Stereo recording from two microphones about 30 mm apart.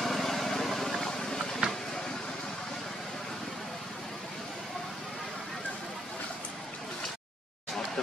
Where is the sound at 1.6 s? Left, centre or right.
Right.